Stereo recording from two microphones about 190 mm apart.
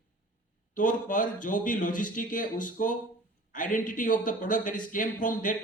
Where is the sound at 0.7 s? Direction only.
45° left (ahead or behind).